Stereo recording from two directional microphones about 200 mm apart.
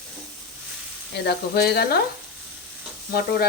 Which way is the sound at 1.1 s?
55° left (ahead or behind).